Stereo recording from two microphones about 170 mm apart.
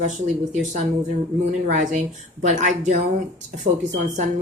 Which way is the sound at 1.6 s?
45° right (ahead or behind).